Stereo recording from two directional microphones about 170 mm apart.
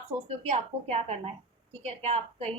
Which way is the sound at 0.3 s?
35° right (ahead or behind).